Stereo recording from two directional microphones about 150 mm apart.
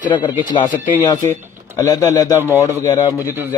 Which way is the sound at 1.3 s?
20° left (ahead or behind).